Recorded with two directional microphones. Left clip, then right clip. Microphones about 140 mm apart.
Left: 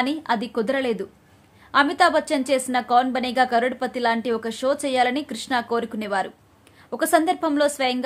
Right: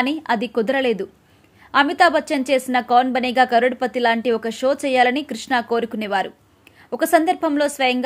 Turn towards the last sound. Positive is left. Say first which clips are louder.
# right 2 dB
turn(degrees=-20)  # may be behind; listen again after turning